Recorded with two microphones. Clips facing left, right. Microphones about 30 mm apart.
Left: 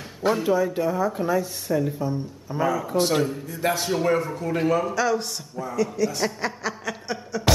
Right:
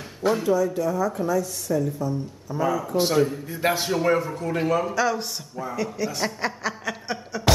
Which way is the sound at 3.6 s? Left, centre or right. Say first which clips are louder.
Right 1 dB; centre.